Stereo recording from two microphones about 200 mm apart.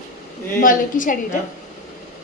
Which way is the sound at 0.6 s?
40° left (ahead or behind).